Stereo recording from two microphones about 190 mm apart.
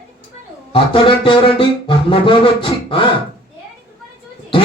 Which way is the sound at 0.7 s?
25° left (ahead or behind).